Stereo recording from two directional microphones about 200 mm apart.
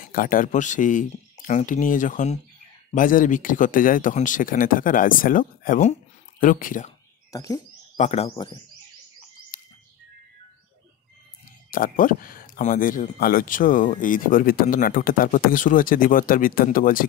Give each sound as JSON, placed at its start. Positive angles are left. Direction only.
{"t": 0.0, "sound": "speech", "side_deg": 45}
{"t": 7.3, "sound": "speech", "side_deg": 15}
{"t": 8.0, "sound": "speech", "side_deg": 35}
{"t": 9.5, "sound": "bird", "side_deg": 45}
{"t": 11.7, "sound": "speech", "side_deg": 45}